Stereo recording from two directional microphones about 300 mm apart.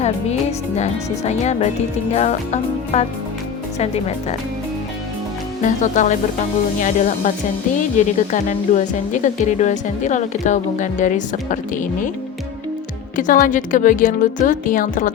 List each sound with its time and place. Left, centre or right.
0.8 s speech: left
5.6 s speech: left
13.1 s speech: left